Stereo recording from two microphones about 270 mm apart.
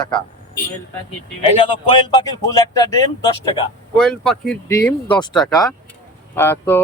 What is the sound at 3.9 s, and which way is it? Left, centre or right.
A man's voice, centre.